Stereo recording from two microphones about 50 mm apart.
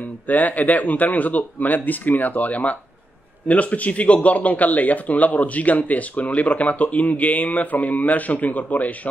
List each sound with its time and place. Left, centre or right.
0.3 s speech: left